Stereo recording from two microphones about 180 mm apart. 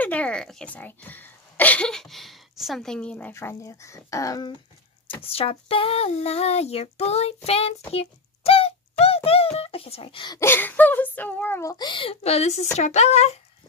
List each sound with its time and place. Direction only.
0.0 s a sound: 10° left (ahead or behind)
0.7 s speech: 10° left (ahead or behind)
5.2 s child singing: 30° left (ahead or behind)
7.9 s a sound: 30° left (ahead or behind)
9.0 s speech: 35° left (ahead or behind)
12.7 s child singing: 40° left (ahead or behind)